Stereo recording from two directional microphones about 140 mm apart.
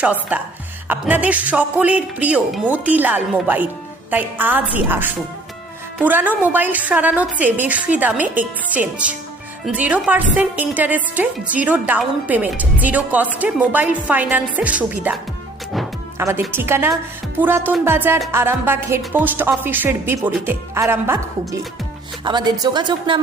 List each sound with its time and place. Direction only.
0.0 s a woman's voice: 10° right (ahead or behind)
16.1 s a woman's voice: 15° right (ahead or behind)
22.2 s a woman's voice: 30° right (ahead or behind)